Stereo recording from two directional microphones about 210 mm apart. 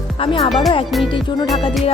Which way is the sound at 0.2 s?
25° left (ahead or behind).